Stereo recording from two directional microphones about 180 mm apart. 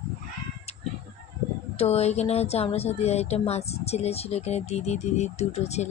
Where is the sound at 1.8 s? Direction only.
35° left (ahead or behind).